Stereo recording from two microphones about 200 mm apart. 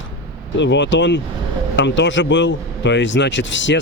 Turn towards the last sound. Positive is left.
turn(degrees=65)  # may be behind; listen again after turning